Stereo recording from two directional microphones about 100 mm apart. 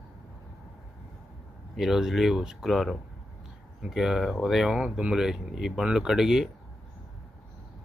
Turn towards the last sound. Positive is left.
turn(degrees=-5)  # may be behind; listen again after turning